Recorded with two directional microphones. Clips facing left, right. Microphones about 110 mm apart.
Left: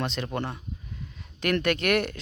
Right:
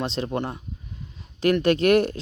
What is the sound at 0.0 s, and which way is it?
Speech, 30° right (ahead or behind).